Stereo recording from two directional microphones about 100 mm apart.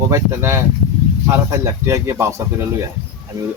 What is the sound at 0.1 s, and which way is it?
A man's voice, 25° right (ahead or behind).